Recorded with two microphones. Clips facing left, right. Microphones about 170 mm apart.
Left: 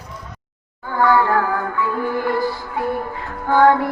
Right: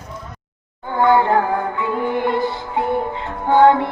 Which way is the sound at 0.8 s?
20° right (ahead or behind).